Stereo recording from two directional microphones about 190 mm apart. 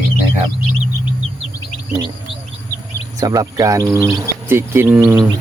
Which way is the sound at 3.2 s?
20° right (ahead or behind).